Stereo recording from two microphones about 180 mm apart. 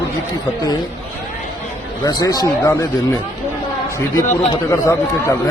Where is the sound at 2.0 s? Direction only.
20° left (ahead or behind).